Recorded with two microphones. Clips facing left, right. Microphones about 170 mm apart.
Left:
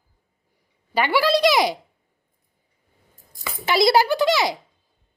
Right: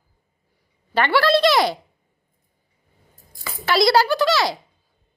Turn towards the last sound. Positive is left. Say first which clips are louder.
# even
turn(degrees=20)  # may be behind; listen again after turning